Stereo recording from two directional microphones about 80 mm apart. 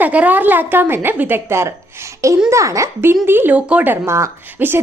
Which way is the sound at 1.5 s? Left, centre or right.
Right.